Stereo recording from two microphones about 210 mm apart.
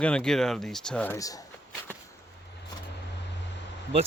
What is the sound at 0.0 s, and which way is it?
Speech, 5° left (ahead or behind).